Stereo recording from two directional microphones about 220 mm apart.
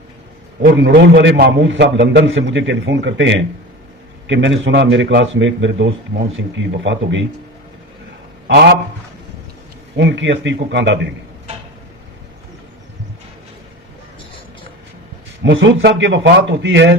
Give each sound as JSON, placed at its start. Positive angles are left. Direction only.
{"t": 0.8, "sound": "a man's voice", "side_deg": -55}
{"t": 8.4, "sound": "a man's voice", "side_deg": -50}
{"t": 10.0, "sound": "speech", "side_deg": -55}
{"t": 15.4, "sound": "speech", "side_deg": -55}